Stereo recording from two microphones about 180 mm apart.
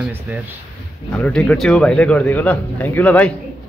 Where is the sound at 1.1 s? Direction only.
5° left (ahead or behind).